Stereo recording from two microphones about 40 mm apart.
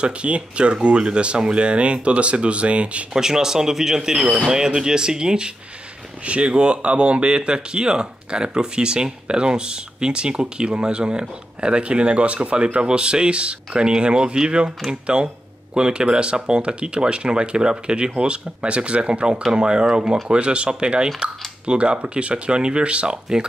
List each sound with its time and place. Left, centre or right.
0.0 s speech: right
3.1 s speech: centre